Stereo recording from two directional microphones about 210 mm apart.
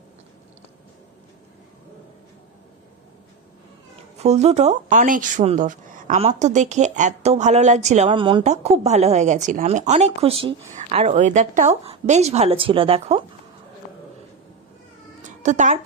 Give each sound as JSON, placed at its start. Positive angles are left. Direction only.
{"t": 4.2, "sound": "speech", "side_deg": -30}
{"t": 15.2, "sound": "cat", "side_deg": -35}